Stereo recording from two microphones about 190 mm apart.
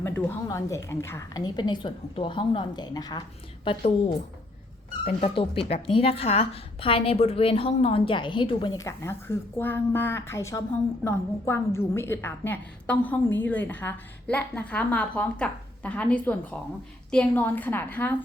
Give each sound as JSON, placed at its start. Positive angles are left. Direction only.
{"t": 0.0, "sound": "a woman's voice", "side_deg": 10}